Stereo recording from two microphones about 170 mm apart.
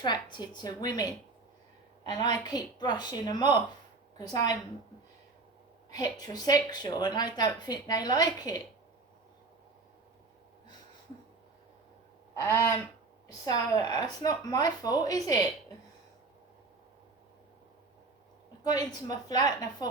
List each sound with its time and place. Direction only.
0.0 s a woman's voice: 25° left (ahead or behind)
5.9 s a woman's voice: 25° left (ahead or behind)
12.3 s a woman's voice: 20° left (ahead or behind)
18.6 s a woman's voice: 25° left (ahead or behind)